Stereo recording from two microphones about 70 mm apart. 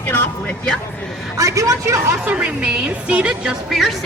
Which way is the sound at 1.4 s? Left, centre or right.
Right.